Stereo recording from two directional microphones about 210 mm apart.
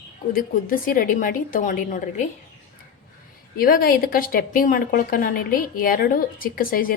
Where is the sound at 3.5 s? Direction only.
45° left (ahead or behind).